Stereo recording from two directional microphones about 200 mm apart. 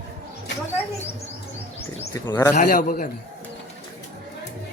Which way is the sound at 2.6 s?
45° left (ahead or behind).